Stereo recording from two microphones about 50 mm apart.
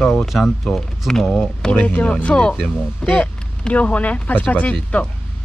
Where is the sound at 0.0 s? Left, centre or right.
Centre.